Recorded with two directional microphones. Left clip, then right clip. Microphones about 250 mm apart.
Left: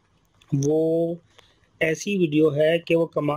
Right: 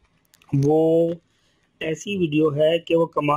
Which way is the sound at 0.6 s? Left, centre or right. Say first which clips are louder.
Right 4 dB; centre.